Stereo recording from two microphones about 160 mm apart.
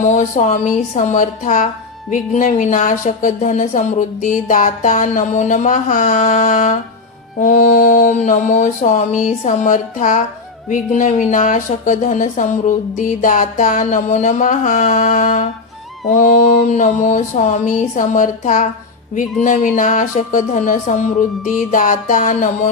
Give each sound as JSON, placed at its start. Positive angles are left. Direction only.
{"t": 0.0, "sound": "speech", "side_deg": 50}